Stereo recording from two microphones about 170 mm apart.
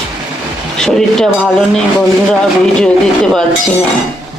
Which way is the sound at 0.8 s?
5° left (ahead or behind).